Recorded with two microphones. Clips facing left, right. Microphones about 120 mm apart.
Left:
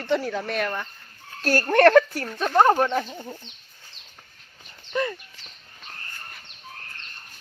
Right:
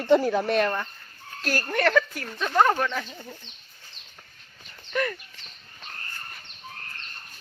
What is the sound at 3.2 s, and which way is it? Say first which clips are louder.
Speech: left 5 dB; 20° left (ahead or behind).